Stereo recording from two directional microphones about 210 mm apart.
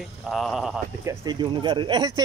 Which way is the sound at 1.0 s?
20° right (ahead or behind).